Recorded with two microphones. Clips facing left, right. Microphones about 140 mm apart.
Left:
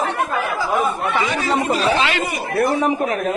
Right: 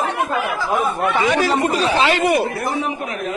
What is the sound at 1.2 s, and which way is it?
Speech, 65° right (ahead or behind).